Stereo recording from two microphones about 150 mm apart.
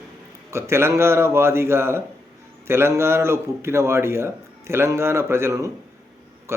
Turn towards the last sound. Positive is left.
turn(degrees=-20)  # may be behind; listen again after turning